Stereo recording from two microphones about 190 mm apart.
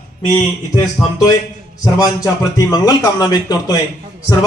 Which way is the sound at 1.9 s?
15° left (ahead or behind).